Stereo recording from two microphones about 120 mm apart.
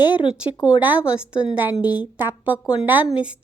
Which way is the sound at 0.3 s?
10° right (ahead or behind).